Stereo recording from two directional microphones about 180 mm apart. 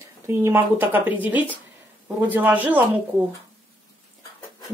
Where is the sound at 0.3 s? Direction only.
15° right (ahead or behind).